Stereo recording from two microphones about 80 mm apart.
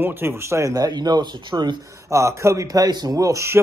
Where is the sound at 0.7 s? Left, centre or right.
Right.